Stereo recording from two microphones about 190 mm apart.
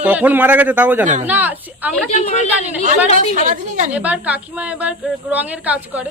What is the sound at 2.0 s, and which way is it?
Speech, 35° left (ahead or behind).